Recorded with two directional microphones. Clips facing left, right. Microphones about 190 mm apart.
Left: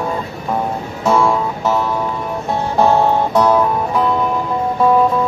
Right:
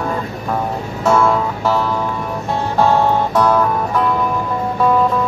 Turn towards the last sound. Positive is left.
turn(degrees=15)  # may be behind; listen again after turning